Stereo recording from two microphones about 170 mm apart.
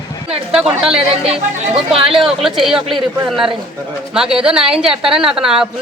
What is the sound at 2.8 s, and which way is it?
Speech, 30° right (ahead or behind).